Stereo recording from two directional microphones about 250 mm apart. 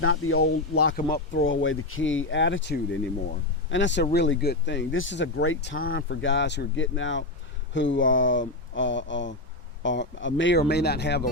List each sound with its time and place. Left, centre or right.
0.0 s speech: left
1.1 s speech: left